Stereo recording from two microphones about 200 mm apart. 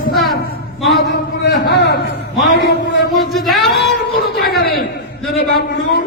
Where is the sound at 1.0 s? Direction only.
60° left (ahead or behind).